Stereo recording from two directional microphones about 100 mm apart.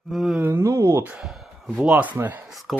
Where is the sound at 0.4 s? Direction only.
25° right (ahead or behind).